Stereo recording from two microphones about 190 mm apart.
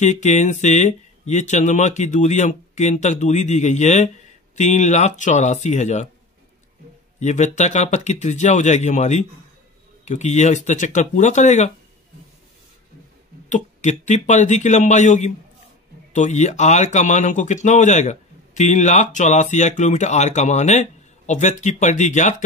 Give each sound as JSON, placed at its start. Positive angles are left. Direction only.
{"t": 0.0, "sound": "speech", "side_deg": 40}
{"t": 7.2, "sound": "speech", "side_deg": 35}
{"t": 13.5, "sound": "speech", "side_deg": 40}